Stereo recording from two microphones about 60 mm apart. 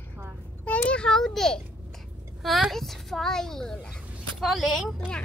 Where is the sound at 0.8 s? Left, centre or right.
Centre.